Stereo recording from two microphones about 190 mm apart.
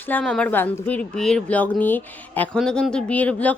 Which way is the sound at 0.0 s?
5° left (ahead or behind).